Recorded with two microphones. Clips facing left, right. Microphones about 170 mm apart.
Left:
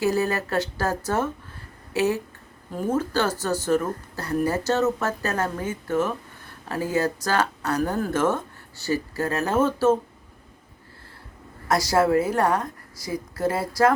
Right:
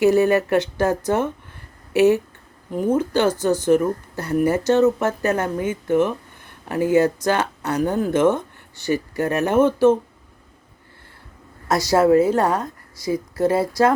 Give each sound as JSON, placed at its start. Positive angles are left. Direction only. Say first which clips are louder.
{"t": 0.0, "sound": "speech", "louder": "right 8 dB", "side_deg": -20}
{"t": 11.7, "sound": "speech", "louder": "right 4 dB", "side_deg": -20}